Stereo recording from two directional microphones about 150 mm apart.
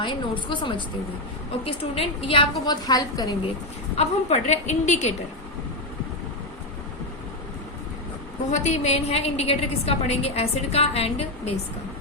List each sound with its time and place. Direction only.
0.0 s a woman's voice: 30° left (ahead or behind)
3.9 s a woman's voice: 45° left (ahead or behind)
8.4 s a woman's voice: 50° left (ahead or behind)